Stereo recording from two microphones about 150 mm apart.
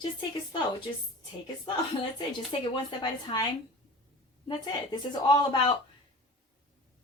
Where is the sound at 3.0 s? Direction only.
30° left (ahead or behind).